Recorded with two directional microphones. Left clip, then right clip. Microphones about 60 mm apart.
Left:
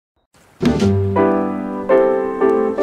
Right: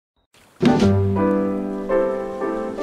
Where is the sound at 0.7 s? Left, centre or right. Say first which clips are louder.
Even; right.